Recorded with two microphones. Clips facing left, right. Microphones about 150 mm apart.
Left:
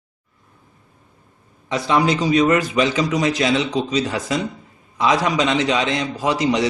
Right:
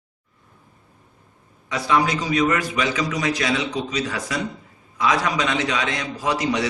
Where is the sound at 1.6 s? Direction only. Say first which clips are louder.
Left 3 dB; 25° left (ahead or behind).